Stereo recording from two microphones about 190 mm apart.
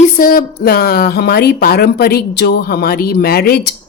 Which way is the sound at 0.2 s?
50° left (ahead or behind).